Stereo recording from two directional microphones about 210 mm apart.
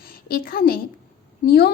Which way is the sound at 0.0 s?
45° left (ahead or behind).